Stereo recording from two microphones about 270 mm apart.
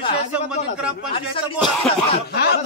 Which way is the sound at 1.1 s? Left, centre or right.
Centre.